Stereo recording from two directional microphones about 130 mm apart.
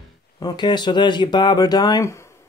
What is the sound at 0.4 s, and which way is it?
Speech, 35° left (ahead or behind).